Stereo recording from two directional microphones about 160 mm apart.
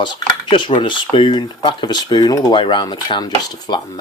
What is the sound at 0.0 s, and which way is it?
Speech, 30° left (ahead or behind).